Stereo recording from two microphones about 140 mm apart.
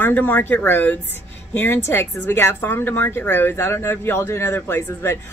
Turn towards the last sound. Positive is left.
turn(degrees=15)  # may be behind; listen again after turning